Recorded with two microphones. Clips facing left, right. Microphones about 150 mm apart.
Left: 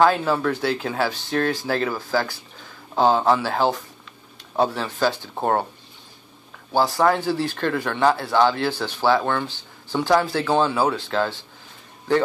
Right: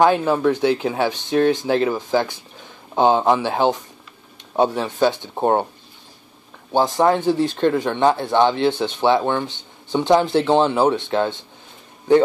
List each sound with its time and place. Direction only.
0.0 s speech: 15° right (ahead or behind)
6.7 s speech: 20° right (ahead or behind)